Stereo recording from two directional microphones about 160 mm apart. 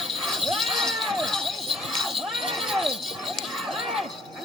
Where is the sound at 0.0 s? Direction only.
Centre (ahead or behind).